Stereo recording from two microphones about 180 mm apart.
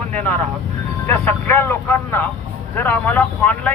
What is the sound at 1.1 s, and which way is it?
Speech, 10° left (ahead or behind).